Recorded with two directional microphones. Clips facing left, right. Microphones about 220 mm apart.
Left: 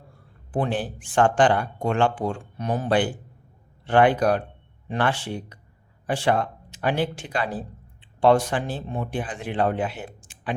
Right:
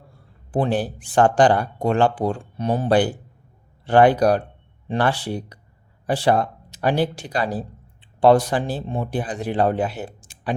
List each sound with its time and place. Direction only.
0.5 s speech: 35° right (ahead or behind)